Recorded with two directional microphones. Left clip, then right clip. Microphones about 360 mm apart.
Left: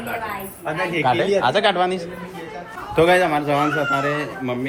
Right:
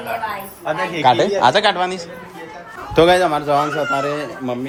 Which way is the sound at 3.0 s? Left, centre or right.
Centre.